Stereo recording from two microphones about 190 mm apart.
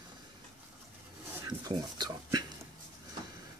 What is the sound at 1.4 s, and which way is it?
Speech, 20° right (ahead or behind).